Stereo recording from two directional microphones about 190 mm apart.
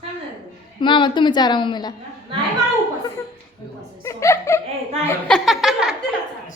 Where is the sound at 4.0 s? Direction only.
15° left (ahead or behind).